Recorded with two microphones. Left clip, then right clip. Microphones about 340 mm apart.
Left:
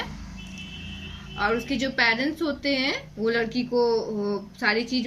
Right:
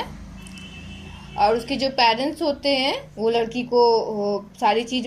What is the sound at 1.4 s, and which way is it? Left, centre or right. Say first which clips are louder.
A woman's voice: right 6 dB; right.